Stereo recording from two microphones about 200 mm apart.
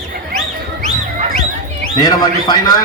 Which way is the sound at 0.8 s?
35° right (ahead or behind).